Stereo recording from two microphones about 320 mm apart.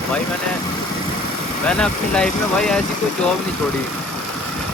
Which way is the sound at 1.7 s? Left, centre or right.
Centre.